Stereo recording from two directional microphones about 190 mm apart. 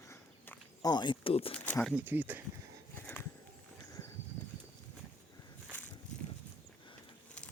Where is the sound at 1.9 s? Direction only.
10° right (ahead or behind).